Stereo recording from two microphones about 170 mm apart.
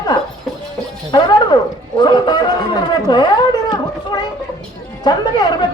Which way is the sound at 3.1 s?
25° left (ahead or behind).